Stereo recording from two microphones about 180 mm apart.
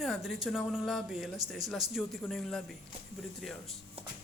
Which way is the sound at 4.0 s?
35° right (ahead or behind).